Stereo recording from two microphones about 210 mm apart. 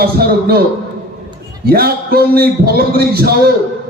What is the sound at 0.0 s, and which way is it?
Speech, 45° right (ahead or behind).